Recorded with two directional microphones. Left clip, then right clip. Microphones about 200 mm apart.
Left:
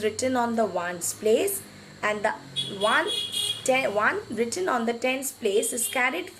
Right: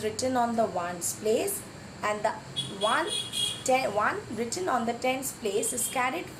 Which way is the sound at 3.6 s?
15° left (ahead or behind).